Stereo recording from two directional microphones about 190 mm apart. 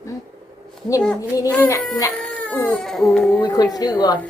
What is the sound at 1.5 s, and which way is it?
Speech, 10° left (ahead or behind).